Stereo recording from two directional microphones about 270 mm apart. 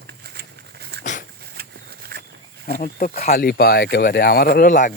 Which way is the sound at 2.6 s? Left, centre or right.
Left.